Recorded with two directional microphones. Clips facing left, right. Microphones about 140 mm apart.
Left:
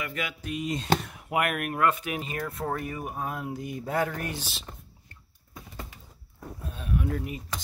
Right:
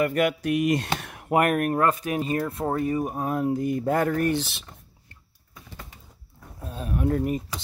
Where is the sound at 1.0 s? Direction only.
65° right (ahead or behind).